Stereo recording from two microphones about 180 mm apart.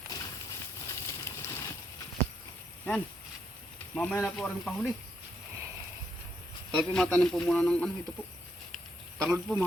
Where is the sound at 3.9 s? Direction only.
5° left (ahead or behind).